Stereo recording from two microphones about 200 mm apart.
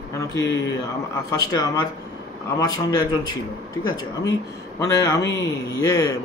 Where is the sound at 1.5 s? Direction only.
20° left (ahead or behind).